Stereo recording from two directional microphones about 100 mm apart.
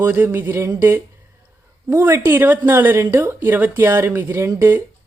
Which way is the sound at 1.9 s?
25° right (ahead or behind).